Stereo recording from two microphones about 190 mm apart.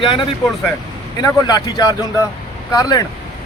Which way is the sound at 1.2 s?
20° left (ahead or behind).